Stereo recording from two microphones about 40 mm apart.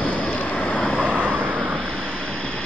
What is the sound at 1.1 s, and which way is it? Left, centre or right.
Vehicle, right.